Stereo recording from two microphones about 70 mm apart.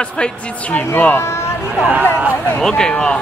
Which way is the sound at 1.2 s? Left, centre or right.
Left.